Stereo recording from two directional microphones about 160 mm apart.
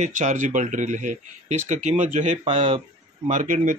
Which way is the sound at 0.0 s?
50° right (ahead or behind).